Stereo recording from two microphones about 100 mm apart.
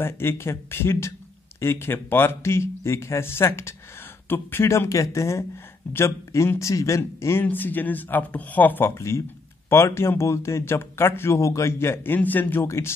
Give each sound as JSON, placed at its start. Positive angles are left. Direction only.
{"t": 0.0, "sound": "speech", "side_deg": 25}